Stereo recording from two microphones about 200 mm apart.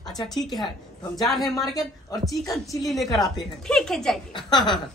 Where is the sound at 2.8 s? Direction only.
Centre (ahead or behind).